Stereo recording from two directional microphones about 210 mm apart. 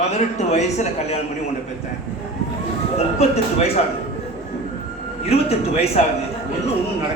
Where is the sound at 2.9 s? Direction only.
30° left (ahead or behind).